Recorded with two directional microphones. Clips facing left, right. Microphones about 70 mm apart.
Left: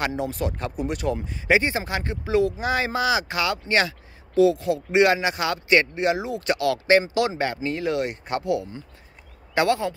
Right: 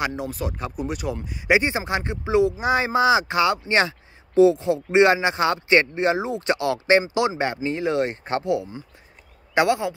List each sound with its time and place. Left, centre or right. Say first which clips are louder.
0.0 s speech: left 1 dB; centre
1.5 s a man's voice: right 1 dB; centre